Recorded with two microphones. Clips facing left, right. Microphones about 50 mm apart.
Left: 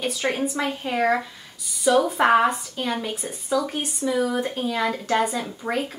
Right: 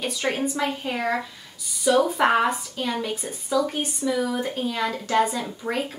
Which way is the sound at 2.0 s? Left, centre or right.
Centre.